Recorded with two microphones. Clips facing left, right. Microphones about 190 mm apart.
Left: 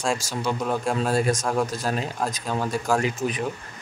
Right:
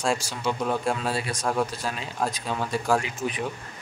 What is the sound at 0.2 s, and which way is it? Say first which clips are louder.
Speech: left 5 dB; 45° left (ahead or behind).